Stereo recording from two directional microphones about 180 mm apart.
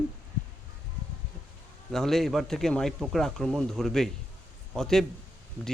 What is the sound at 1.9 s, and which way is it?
Speech, centre (ahead or behind).